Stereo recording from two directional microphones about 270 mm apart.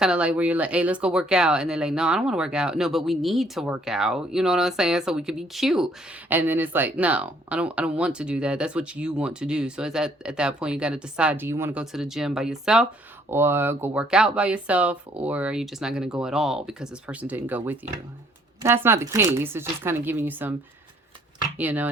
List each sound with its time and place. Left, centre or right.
0.0 s speech: centre
21.6 s speech: centre